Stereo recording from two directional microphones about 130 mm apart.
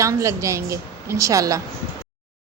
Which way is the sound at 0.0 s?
25° right (ahead or behind).